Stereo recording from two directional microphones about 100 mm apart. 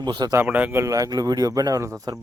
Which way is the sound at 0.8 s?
35° right (ahead or behind).